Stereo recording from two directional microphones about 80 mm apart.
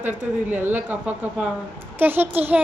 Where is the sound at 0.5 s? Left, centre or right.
Right.